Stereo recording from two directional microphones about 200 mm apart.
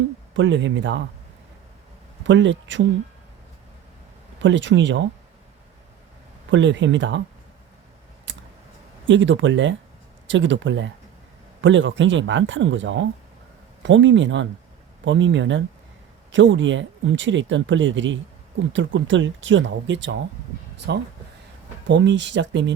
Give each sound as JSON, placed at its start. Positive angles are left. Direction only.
{"t": 0.3, "sound": "speech", "side_deg": -70}
{"t": 2.2, "sound": "speech", "side_deg": -65}
{"t": 4.4, "sound": "speech", "side_deg": -65}
{"t": 6.5, "sound": "speech", "side_deg": -65}
{"t": 8.3, "sound": "clicking", "side_deg": -65}
{"t": 9.0, "sound": "speech", "side_deg": -70}